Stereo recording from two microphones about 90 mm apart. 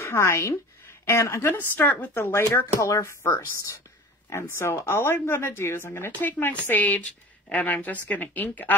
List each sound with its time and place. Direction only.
0.0 s a woman's voice: 30° left (ahead or behind)
1.6 s speech: 20° left (ahead or behind)